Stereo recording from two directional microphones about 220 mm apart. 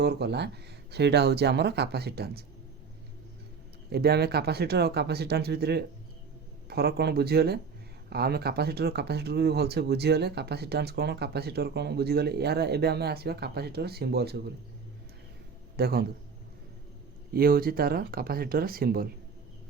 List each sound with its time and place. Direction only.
0.0 s speech: 50° right (ahead or behind)
3.8 s speech: 45° right (ahead or behind)
15.7 s a man's voice: 45° right (ahead or behind)
17.3 s speech: 40° right (ahead or behind)